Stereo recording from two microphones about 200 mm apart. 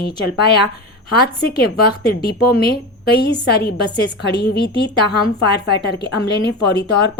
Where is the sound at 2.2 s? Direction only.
50° left (ahead or behind).